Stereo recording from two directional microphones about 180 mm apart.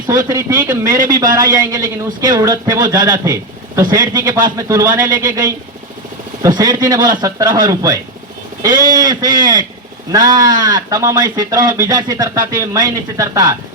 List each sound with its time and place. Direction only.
0.3 s a man's voice: 15° right (ahead or behind)
9.2 s a man's voice: 50° right (ahead or behind)
10.1 s a man's voice: 20° right (ahead or behind)